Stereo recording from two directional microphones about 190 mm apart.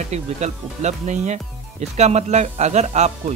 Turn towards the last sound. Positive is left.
turn(degrees=-35)  # may be behind; listen again after turning